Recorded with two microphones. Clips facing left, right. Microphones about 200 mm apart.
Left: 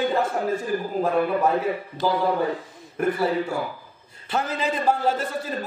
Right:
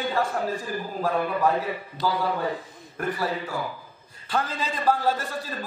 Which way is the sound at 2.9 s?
25° left (ahead or behind).